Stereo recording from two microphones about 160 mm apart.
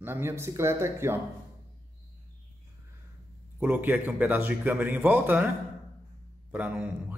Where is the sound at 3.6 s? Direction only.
10° right (ahead or behind).